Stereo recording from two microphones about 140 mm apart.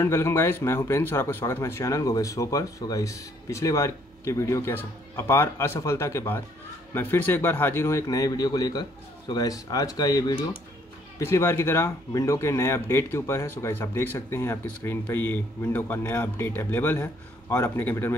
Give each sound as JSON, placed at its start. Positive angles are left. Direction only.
{"t": 0.0, "sound": "speech", "side_deg": 20}